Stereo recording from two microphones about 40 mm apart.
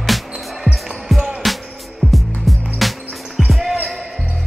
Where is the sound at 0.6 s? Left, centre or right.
Centre.